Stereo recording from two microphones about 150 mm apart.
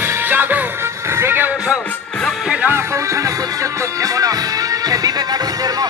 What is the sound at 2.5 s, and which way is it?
Speech, 15° right (ahead or behind).